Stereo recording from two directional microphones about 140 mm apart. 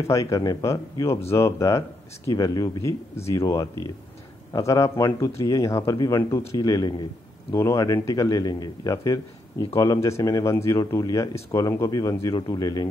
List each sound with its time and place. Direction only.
0.0 s a man's voice: 25° left (ahead or behind)